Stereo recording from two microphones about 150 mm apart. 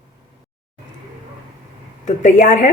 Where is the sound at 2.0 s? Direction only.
55° left (ahead or behind).